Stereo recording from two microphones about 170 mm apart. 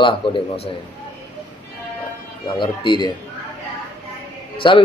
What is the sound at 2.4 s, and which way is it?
Speech, 25° left (ahead or behind).